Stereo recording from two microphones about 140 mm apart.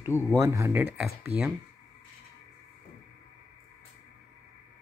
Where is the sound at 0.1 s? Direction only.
15° left (ahead or behind).